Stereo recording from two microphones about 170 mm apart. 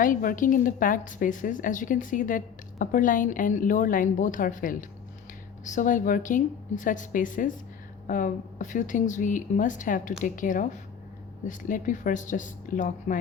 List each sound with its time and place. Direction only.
0.0 s a woman's voice: 55° left (ahead or behind)